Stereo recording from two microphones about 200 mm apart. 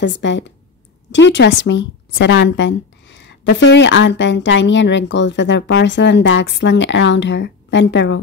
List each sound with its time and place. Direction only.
0.0 s a woman's voice: 65° left (ahead or behind)